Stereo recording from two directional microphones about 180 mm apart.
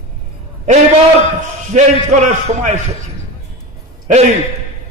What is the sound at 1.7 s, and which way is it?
A man's voice, 40° right (ahead or behind).